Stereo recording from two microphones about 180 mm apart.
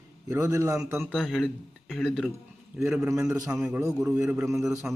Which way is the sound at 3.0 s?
15° right (ahead or behind).